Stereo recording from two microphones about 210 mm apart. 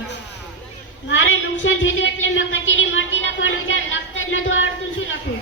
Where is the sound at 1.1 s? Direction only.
60° left (ahead or behind).